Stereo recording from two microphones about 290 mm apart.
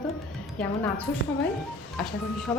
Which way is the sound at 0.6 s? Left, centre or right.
Centre.